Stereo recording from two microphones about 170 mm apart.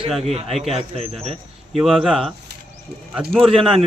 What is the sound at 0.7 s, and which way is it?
Speech, 35° right (ahead or behind).